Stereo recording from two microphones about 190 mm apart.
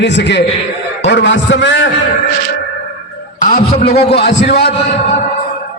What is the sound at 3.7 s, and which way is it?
Speech, 30° left (ahead or behind).